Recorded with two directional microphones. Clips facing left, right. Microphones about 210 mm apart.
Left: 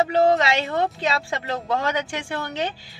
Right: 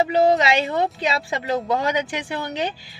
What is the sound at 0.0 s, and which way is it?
A woman's voice, 20° right (ahead or behind).